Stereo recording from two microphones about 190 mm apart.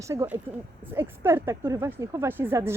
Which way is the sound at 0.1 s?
15° right (ahead or behind).